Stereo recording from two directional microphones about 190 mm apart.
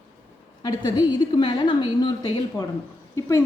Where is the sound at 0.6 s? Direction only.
20° left (ahead or behind).